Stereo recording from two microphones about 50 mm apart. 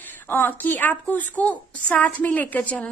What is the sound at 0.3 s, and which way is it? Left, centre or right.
A woman's voice, left.